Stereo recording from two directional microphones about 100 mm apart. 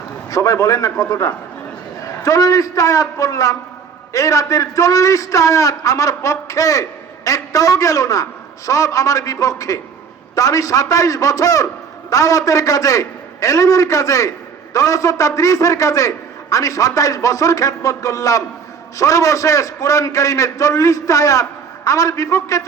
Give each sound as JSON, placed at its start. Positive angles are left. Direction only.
{"t": 0.3, "sound": "a man's voice", "side_deg": 35}